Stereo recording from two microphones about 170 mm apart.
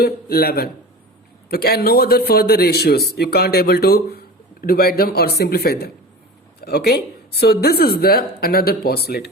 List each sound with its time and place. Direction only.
0.0 s a man's voice: 65° left (ahead or behind)